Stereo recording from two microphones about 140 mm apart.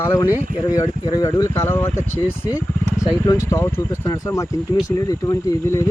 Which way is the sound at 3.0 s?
20° left (ahead or behind).